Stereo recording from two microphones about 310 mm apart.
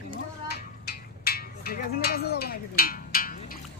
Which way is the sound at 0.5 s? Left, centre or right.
Left.